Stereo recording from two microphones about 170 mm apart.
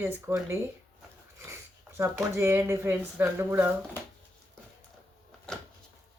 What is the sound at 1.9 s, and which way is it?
Speech, 15° right (ahead or behind).